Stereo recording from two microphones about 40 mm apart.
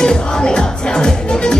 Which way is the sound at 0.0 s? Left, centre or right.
Centre.